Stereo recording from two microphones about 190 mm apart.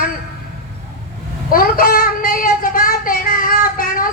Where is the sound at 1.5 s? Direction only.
50° left (ahead or behind).